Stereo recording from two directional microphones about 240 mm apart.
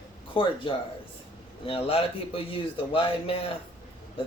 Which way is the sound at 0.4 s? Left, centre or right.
Left.